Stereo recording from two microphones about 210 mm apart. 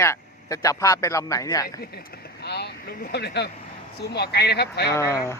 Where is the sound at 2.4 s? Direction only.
50° left (ahead or behind).